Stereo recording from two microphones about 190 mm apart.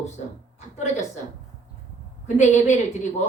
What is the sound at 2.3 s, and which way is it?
Speech, 35° left (ahead or behind).